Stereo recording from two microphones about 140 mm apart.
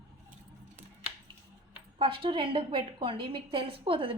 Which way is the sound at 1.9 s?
40° right (ahead or behind).